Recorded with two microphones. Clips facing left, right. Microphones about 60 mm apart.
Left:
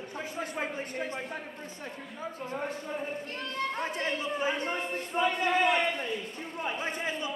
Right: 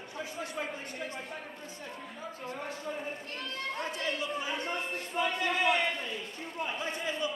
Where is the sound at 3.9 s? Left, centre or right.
Left.